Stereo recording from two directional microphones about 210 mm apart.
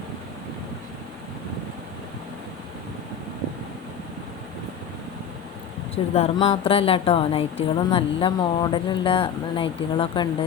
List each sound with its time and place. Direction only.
6.1 s a woman's voice: 30° left (ahead or behind)